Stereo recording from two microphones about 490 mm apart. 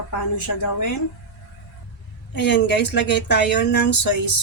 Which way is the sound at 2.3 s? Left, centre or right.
Left.